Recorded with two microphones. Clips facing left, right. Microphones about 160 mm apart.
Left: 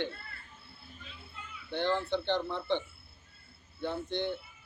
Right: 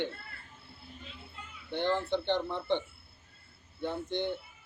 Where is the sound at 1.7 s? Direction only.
20° right (ahead or behind).